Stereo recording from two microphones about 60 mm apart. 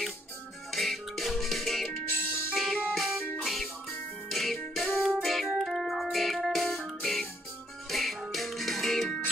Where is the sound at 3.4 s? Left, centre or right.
Centre.